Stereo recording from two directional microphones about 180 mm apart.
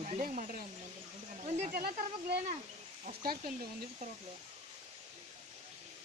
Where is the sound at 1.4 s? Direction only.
35° right (ahead or behind).